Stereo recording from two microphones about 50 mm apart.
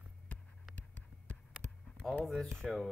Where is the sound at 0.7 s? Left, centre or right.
Left.